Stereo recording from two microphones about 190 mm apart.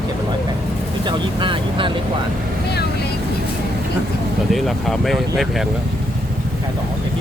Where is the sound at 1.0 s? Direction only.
25° right (ahead or behind).